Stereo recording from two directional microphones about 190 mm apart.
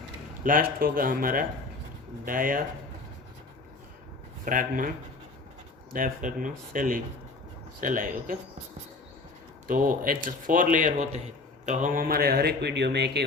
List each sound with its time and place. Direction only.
0.4 s speech: 50° right (ahead or behind)
4.4 s speech: 45° right (ahead or behind)
5.9 s speech: 45° right (ahead or behind)
9.6 s speech: 45° right (ahead or behind); by 13.2 s 60° right (ahead or behind)